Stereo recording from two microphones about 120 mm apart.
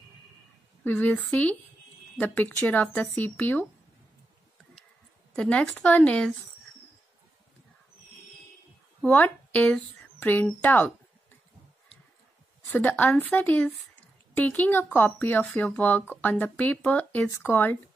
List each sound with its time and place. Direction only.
0.8 s speech: 10° left (ahead or behind)
5.3 s speech: 10° left (ahead or behind)
9.0 s speech: 10° left (ahead or behind)
12.6 s speech: 10° left (ahead or behind)